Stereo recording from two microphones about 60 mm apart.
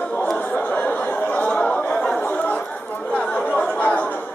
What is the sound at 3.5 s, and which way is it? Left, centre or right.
Chatter, left.